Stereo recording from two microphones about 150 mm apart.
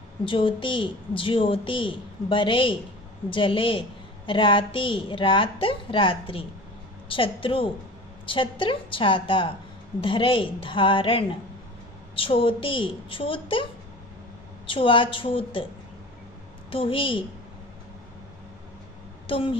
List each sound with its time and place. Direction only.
0.2 s a woman's voice: 35° left (ahead or behind)
14.7 s a woman's voice: 35° left (ahead or behind)
16.7 s a woman's voice: 35° left (ahead or behind)
19.2 s speech: 35° left (ahead or behind)